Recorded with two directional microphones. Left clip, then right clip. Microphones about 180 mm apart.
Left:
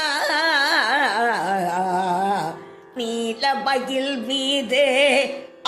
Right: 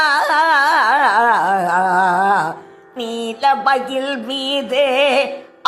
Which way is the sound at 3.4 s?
5° left (ahead or behind).